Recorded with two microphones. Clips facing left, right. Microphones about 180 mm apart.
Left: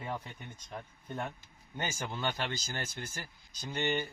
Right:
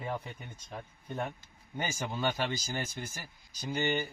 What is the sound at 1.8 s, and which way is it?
Speech, 10° right (ahead or behind).